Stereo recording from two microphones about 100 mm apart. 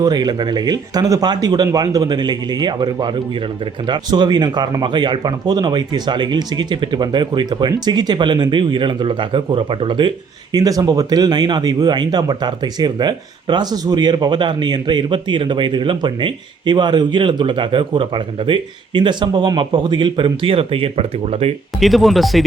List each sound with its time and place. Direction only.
0.0 s speech: 45° right (ahead or behind)
10.5 s speech: 40° right (ahead or behind); by 21.5 s 80° right
21.8 s speech: centre (ahead or behind)